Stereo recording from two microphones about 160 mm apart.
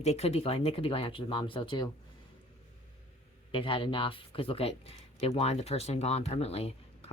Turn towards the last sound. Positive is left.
turn(degrees=40)  # may be behind; listen again after turning